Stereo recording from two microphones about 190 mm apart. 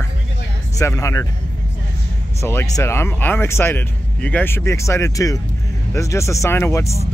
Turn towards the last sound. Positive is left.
turn(degrees=15)  # may be behind; listen again after turning